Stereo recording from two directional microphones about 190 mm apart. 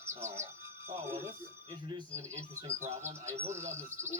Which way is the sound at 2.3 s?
40° right (ahead or behind).